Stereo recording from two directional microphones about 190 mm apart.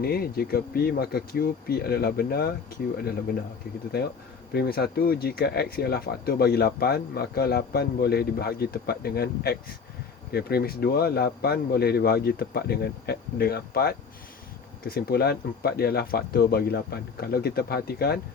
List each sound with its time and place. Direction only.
0.0 s speech: 55° left (ahead or behind)
4.5 s speech: 55° left (ahead or behind)